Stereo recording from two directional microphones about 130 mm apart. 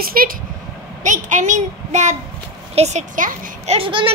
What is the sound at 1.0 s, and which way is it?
A child's voice, 75° right (ahead or behind).